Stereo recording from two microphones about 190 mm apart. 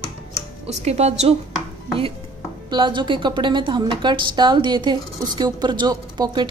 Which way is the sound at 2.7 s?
25° right (ahead or behind).